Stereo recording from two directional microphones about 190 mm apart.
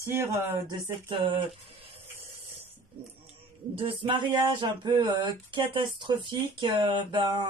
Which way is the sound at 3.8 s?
25° right (ahead or behind).